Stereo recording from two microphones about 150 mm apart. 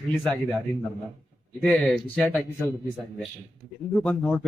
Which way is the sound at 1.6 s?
5° left (ahead or behind).